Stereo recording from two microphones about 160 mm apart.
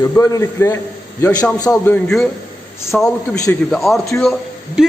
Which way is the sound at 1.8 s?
10° left (ahead or behind).